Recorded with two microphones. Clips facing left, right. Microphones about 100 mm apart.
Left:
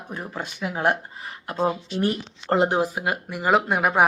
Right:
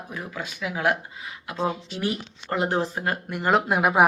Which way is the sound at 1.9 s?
40° left (ahead or behind).